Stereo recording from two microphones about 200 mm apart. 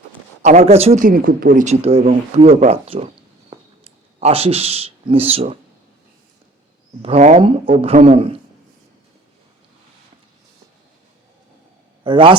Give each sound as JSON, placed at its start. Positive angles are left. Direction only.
{"t": 0.4, "sound": "speech", "side_deg": -35}
{"t": 1.0, "sound": "speech", "side_deg": -45}
{"t": 7.0, "sound": "a man's voice", "side_deg": -35}
{"t": 12.0, "sound": "a man's voice", "side_deg": -25}